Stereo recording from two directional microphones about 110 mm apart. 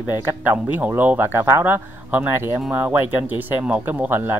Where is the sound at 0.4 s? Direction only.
15° right (ahead or behind).